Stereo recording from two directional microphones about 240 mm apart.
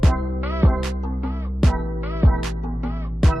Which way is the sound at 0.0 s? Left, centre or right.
Centre.